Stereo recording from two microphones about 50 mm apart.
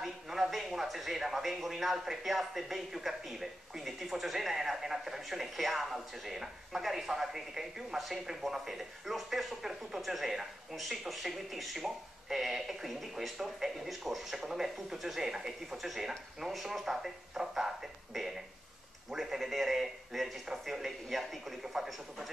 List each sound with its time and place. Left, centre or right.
0.0 s speech: centre